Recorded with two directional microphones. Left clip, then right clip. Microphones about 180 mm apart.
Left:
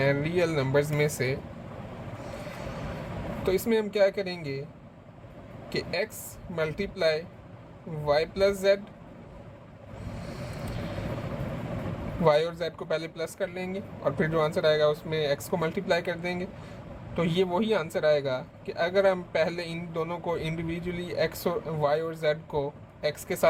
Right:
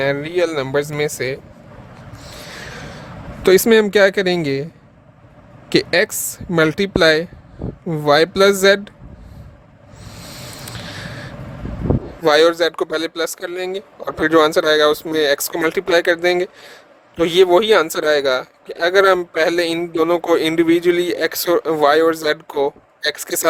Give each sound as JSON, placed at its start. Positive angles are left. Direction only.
{"t": 0.0, "sound": "a man's voice", "side_deg": -55}
{"t": 3.4, "sound": "a man's voice", "side_deg": -65}
{"t": 5.6, "sound": "a man's voice", "side_deg": -60}
{"t": 12.2, "sound": "a man's voice", "side_deg": -65}